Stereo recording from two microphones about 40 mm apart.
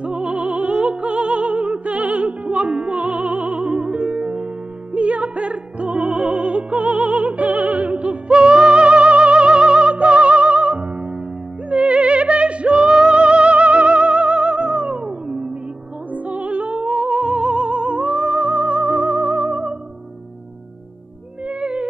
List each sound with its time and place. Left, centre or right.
0.0 s music: right
4.9 s opera: right
11.7 s music: right
21.5 s music: right